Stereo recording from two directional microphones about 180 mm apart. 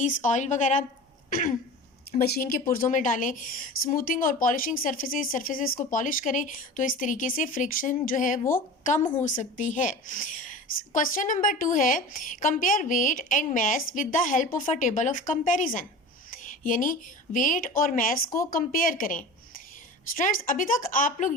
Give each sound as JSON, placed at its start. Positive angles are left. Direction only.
{"t": 0.2, "sound": "a woman's voice", "side_deg": 40}
{"t": 2.1, "sound": "a woman's voice", "side_deg": 55}